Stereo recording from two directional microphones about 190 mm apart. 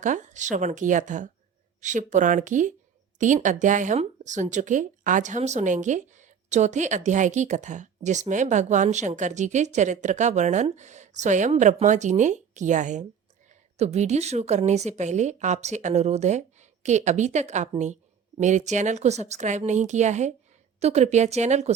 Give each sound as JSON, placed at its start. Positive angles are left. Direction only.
{"t": 0.0, "sound": "speech", "side_deg": -40}